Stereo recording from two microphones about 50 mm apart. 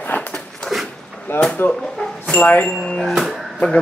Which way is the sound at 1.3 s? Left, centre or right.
Left.